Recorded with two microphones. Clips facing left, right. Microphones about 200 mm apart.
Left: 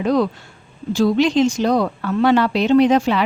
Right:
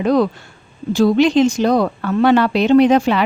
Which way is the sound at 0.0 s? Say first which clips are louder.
Right 2 dB; 60° right (ahead or behind).